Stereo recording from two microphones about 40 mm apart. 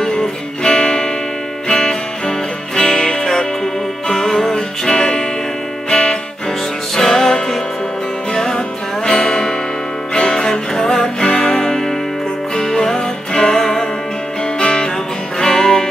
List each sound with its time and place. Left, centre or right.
0.0 s music: centre